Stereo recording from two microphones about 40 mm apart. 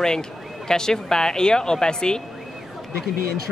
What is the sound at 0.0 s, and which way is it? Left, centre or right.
Speech, centre.